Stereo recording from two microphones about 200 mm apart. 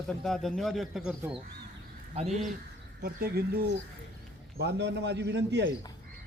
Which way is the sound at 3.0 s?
50° right (ahead or behind).